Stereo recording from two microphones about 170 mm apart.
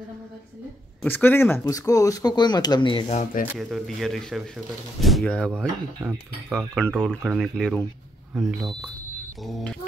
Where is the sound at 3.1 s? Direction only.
50° left (ahead or behind).